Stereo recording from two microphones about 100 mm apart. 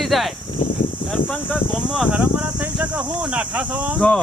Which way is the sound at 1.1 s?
5° left (ahead or behind).